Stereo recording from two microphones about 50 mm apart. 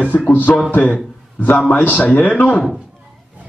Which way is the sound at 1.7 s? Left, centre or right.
Left.